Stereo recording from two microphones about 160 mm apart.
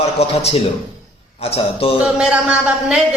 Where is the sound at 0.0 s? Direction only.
40° left (ahead or behind).